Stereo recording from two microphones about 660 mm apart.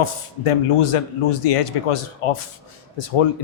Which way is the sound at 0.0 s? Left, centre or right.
Left.